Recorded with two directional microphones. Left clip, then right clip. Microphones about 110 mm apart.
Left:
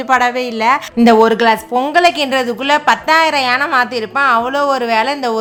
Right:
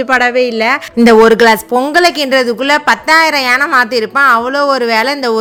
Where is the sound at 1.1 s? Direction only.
35° right (ahead or behind).